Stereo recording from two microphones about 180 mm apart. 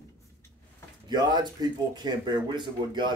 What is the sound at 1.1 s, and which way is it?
Speech, 25° right (ahead or behind).